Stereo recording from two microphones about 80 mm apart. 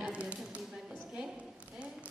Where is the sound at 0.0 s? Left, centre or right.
Centre.